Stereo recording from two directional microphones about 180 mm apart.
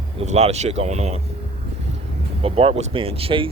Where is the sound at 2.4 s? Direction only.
35° right (ahead or behind).